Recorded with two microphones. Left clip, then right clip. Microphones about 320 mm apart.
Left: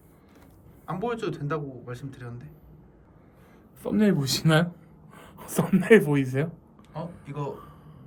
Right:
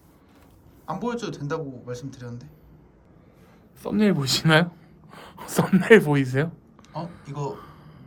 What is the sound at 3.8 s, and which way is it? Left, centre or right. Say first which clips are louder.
A man's voice: right 1 dB; centre.